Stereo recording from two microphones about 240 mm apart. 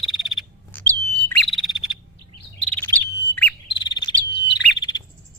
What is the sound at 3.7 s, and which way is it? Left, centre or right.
Bird, centre.